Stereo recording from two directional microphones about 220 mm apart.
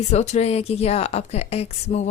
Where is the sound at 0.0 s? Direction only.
30° left (ahead or behind).